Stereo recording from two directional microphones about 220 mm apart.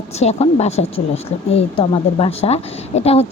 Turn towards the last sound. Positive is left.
turn(degrees=30)  # may be behind; listen again after turning